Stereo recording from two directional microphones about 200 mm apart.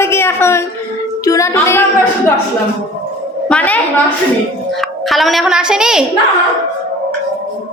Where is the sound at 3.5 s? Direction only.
5° left (ahead or behind).